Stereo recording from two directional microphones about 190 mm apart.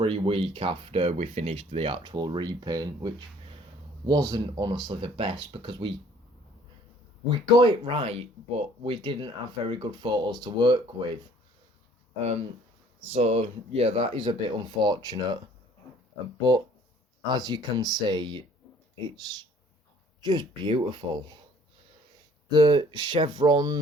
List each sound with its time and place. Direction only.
0.0 s speech: 30° right (ahead or behind)
7.3 s speech: 25° right (ahead or behind)
13.1 s speech: 30° right (ahead or behind)
17.2 s speech: 20° right (ahead or behind)
22.4 s speech: 25° right (ahead or behind)